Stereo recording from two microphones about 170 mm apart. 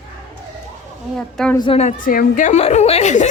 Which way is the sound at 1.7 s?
40° left (ahead or behind).